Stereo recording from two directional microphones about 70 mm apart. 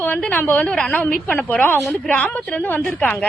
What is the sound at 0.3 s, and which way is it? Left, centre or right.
A woman's voice, left.